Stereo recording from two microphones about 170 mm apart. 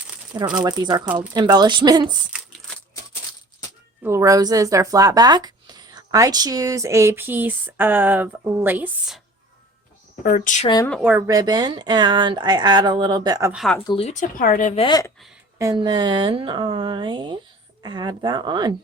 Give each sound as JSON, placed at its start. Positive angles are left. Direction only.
{"t": 0.5, "sound": "speech", "side_deg": -25}
{"t": 1.0, "sound": "speech", "side_deg": -10}
{"t": 1.3, "sound": "speech", "side_deg": -25}
{"t": 4.0, "sound": "speech", "side_deg": -15}
{"t": 10.2, "sound": "speech", "side_deg": 50}
{"t": 11.3, "sound": "speech", "side_deg": -20}
{"t": 13.5, "sound": "speech", "side_deg": 0}
{"t": 13.8, "sound": "speech", "side_deg": 30}
{"t": 14.1, "sound": "speech", "side_deg": 50}
{"t": 14.8, "sound": "speech", "side_deg": 25}
{"t": 15.5, "sound": "speech", "side_deg": -20}